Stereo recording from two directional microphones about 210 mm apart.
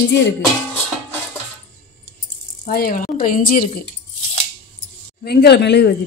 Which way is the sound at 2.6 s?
45° left (ahead or behind).